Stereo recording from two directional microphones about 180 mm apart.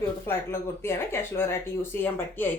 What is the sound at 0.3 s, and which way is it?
A woman's voice, 15° left (ahead or behind).